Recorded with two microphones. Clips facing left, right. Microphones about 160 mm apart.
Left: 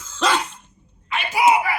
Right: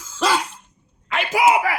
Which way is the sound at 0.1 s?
10° right (ahead or behind).